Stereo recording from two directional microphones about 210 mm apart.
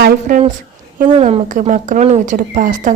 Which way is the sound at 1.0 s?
30° right (ahead or behind).